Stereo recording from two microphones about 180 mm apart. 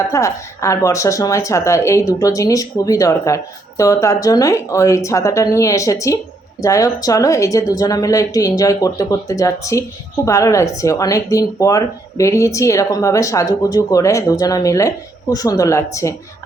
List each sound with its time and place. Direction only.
0.1 s a woman's voice: 15° left (ahead or behind)